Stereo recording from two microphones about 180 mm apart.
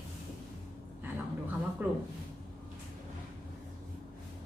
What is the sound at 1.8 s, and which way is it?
Speech, 10° right (ahead or behind).